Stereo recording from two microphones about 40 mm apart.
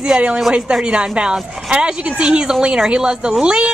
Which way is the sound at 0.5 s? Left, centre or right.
Centre.